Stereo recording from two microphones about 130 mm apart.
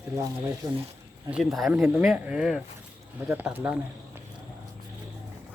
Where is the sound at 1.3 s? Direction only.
Centre (ahead or behind).